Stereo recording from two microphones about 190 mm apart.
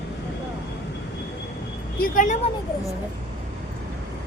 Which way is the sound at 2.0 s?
45° left (ahead or behind).